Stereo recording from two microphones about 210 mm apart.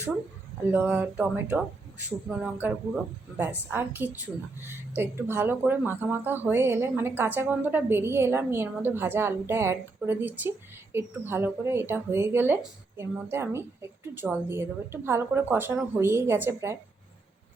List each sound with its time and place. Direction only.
0.7 s a woman's voice: 10° right (ahead or behind)